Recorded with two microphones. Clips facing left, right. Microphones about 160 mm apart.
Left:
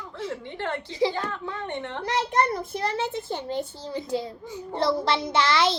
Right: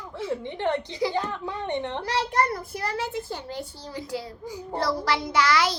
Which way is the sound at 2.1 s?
20° left (ahead or behind).